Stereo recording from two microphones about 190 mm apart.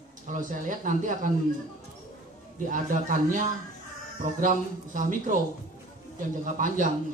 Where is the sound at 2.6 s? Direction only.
45° right (ahead or behind).